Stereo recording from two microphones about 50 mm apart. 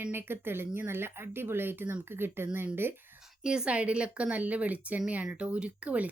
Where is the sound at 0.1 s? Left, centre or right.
Right.